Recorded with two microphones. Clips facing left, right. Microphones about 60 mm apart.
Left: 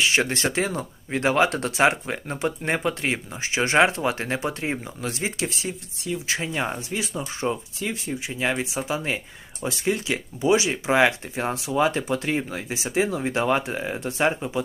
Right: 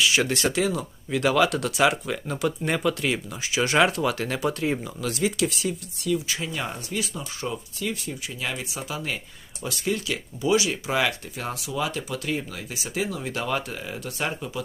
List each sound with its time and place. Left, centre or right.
0.0 s speech: left